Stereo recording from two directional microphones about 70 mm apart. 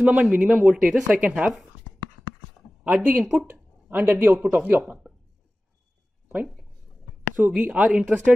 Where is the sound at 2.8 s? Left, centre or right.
Right.